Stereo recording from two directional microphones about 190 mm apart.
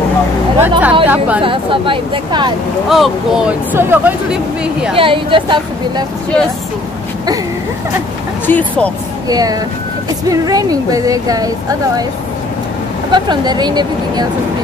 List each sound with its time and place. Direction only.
0.6 s speech: 10° right (ahead or behind)
1.4 s speech: 25° right (ahead or behind)
2.9 s speech: centre (ahead or behind)
4.9 s speech: 25° right (ahead or behind)
8.5 s speech: 10° left (ahead or behind)
9.3 s speech: 20° right (ahead or behind)
13.1 s speech: 20° right (ahead or behind)